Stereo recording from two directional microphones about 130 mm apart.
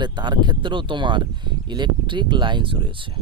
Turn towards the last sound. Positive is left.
turn(degrees=-40)  # may be behind; listen again after turning